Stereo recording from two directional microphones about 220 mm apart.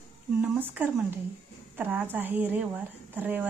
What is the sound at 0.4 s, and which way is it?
A woman's voice, 5° right (ahead or behind).